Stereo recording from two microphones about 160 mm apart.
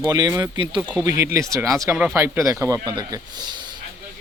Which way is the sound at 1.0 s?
20° right (ahead or behind).